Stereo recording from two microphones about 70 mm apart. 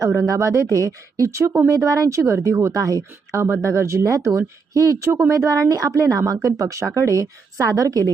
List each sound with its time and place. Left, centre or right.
0.0 s speech: right